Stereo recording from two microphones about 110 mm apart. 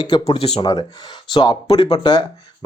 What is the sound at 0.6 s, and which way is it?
Speech, 35° left (ahead or behind).